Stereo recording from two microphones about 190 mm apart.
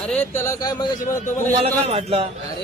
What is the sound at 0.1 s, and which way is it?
Speech, 10° left (ahead or behind).